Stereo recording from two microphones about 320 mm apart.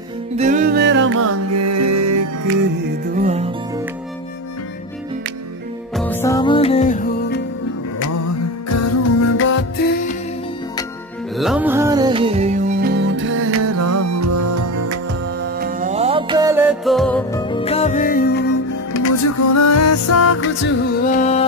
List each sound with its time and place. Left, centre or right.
0.4 s music: right
1.2 s music: right
3.2 s music: right
5.9 s music: centre; by 7.4 s left
8.6 s music: left
11.3 s music: centre; by 15.0 s right
15.6 s music: right; by 17.4 s centre
17.4 s music: centre; by 18.6 s left
18.9 s music: left
20.3 s music: left